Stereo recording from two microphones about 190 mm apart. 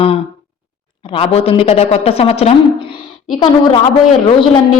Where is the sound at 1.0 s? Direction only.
30° left (ahead or behind).